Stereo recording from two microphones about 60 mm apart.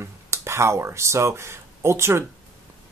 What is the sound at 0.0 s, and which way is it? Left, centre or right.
Speech, right.